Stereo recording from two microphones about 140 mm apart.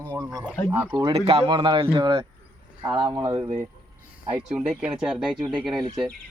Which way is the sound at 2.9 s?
30° right (ahead or behind).